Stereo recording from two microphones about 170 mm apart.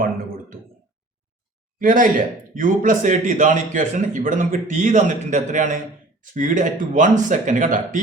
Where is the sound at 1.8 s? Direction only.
55° right (ahead or behind).